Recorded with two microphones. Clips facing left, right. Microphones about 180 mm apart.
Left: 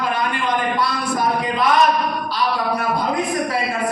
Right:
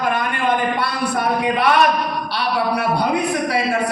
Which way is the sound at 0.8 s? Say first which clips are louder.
Even; 60° right (ahead or behind).